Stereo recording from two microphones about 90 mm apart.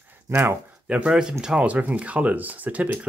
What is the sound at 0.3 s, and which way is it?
Speech, 25° right (ahead or behind).